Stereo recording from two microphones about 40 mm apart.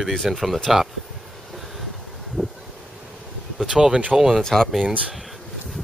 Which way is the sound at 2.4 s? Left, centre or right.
Left.